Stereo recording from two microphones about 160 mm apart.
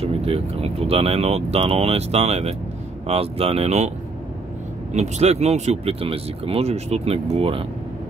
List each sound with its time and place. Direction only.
0.0 s speech: 40° right (ahead or behind)
4.9 s speech: 45° right (ahead or behind)